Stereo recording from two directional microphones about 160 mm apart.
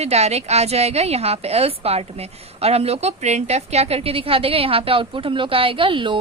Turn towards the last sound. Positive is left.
turn(degrees=-30)  # may be behind; listen again after turning